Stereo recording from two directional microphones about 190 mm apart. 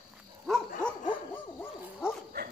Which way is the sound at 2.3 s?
55° right (ahead or behind).